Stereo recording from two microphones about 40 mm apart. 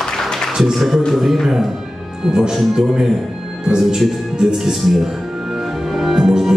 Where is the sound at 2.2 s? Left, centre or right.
Centre.